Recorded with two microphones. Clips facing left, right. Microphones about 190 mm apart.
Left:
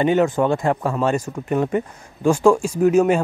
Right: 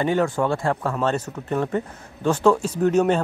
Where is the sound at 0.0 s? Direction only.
20° left (ahead or behind).